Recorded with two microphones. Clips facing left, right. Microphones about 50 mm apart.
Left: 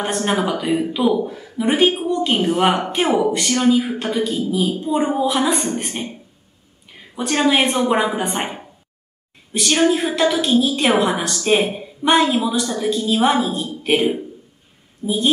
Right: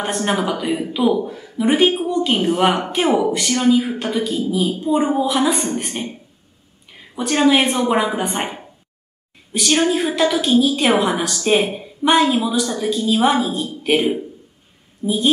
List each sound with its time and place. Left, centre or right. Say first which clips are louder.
0.0 s a woman's voice: even; centre
15.0 s a woman's voice: right 1 dB; centre